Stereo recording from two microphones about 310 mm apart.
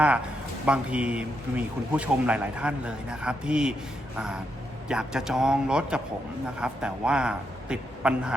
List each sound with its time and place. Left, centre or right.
0.6 s speech: centre
4.9 s speech: centre